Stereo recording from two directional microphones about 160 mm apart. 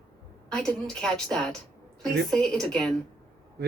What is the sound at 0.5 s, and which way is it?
A woman's voice, 5° left (ahead or behind).